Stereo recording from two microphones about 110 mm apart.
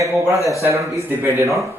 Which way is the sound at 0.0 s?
25° right (ahead or behind).